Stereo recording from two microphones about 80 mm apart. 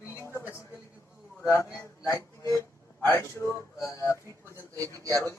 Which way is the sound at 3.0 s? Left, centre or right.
Left.